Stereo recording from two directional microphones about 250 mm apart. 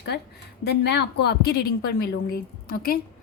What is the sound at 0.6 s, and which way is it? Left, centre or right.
A woman's voice, left.